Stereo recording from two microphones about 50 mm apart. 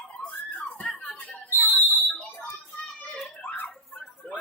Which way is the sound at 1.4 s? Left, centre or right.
Left.